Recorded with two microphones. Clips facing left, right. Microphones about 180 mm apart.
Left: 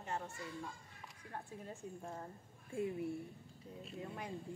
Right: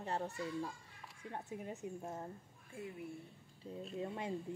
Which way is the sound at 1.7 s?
20° right (ahead or behind).